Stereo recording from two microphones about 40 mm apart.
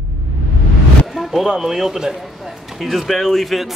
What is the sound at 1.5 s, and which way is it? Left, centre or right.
Speech, centre.